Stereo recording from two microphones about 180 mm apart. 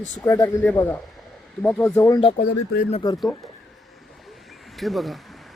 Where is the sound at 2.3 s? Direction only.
55° left (ahead or behind).